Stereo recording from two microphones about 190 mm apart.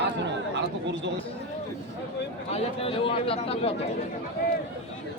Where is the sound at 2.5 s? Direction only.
30° left (ahead or behind).